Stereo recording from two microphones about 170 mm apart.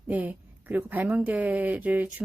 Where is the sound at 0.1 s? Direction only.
10° right (ahead or behind).